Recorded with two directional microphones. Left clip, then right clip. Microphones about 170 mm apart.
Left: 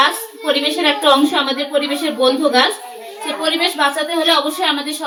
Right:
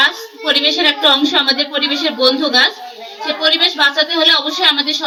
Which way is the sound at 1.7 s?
50° left (ahead or behind).